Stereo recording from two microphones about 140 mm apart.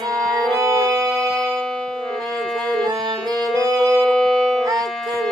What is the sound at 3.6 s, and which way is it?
Music, 25° right (ahead or behind).